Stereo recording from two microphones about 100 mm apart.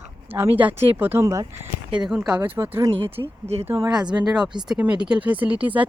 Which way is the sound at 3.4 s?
90° right.